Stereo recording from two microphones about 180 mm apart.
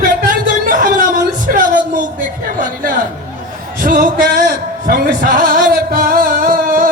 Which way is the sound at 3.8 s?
50° right (ahead or behind).